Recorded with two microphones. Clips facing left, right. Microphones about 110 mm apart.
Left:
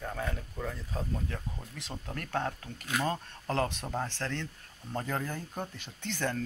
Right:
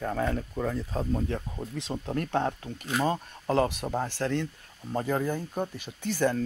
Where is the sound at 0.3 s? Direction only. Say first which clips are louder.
Right 8 dB; 55° right (ahead or behind).